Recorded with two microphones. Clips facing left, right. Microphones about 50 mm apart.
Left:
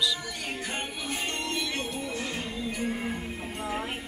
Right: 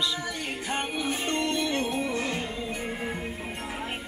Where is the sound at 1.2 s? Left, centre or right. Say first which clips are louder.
Right 3 dB; right.